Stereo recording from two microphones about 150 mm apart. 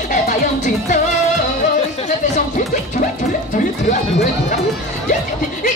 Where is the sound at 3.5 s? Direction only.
60° left (ahead or behind).